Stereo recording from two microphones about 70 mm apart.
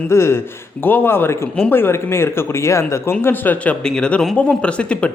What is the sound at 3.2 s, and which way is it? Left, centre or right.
Speech, left.